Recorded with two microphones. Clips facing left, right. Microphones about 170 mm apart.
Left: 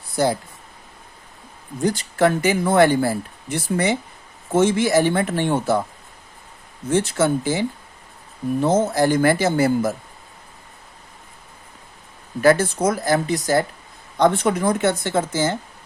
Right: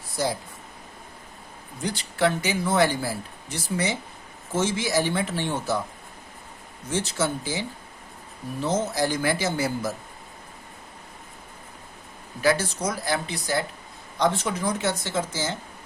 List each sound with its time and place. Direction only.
1.8 s speech: 45° left (ahead or behind)
6.9 s speech: 55° left (ahead or behind)
8.6 s speech: 55° left (ahead or behind)
12.4 s speech: 50° left (ahead or behind)